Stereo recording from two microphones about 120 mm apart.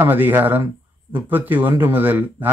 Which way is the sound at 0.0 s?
15° right (ahead or behind).